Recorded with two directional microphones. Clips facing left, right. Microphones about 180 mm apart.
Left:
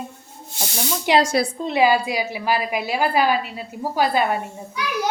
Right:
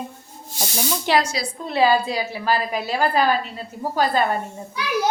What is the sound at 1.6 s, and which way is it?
Speech, 15° left (ahead or behind).